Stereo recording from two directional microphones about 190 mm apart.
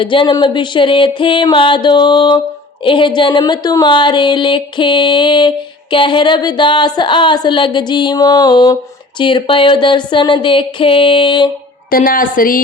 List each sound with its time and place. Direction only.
0.0 s speech: 25° left (ahead or behind)
11.9 s a woman's voice: 50° left (ahead or behind)